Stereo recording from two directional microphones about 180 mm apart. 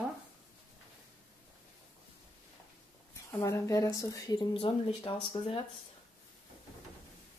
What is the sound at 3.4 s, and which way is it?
Speech, 15° left (ahead or behind).